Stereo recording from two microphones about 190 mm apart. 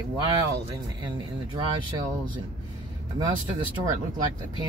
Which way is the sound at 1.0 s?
25° right (ahead or behind).